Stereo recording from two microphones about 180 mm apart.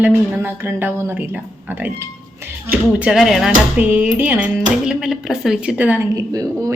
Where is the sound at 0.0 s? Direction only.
10° right (ahead or behind).